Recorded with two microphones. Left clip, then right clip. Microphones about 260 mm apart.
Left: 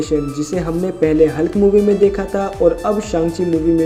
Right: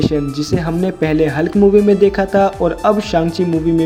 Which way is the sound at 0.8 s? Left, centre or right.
Right.